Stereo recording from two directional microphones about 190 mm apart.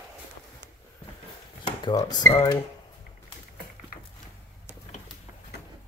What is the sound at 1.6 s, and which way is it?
Speech, 20° left (ahead or behind).